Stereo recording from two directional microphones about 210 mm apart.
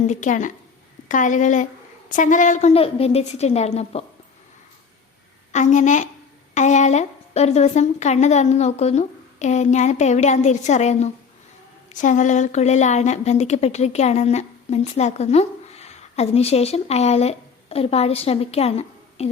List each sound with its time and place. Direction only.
0.1 s a woman's voice: 35° left (ahead or behind)
5.5 s a woman's voice: 35° left (ahead or behind)